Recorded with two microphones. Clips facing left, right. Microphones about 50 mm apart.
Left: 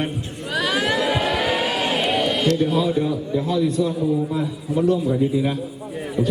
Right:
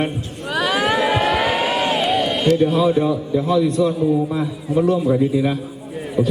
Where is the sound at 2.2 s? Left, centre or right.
Centre.